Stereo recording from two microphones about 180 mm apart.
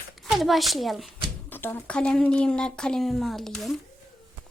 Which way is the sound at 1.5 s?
10° left (ahead or behind).